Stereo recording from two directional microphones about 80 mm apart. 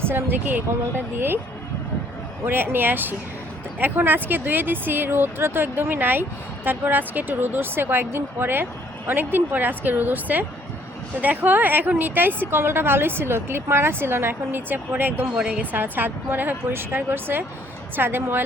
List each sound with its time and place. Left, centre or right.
0.0 s a woman's voice: right
2.4 s a woman's voice: right
15.4 s speech: centre
15.7 s a woman's voice: right